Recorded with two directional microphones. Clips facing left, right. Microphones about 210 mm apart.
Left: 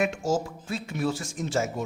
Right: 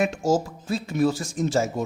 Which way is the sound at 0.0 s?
35° right (ahead or behind).